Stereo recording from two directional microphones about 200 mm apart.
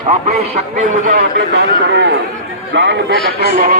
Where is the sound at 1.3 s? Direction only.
60° right (ahead or behind).